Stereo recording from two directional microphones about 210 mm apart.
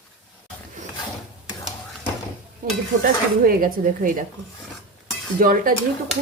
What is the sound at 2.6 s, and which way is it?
Stir, 40° right (ahead or behind).